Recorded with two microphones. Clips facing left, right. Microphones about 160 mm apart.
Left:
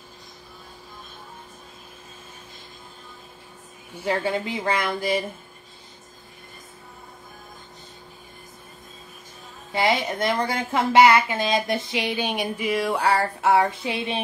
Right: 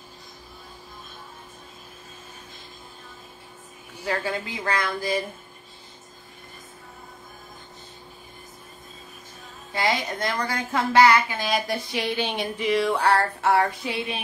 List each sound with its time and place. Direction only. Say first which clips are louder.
4.0 s a woman's voice: left 3 dB; 25° left (ahead or behind)
9.8 s a woman's voice: left 3 dB; 20° left (ahead or behind)
13.5 s a woman's voice: left 2 dB; 20° left (ahead or behind)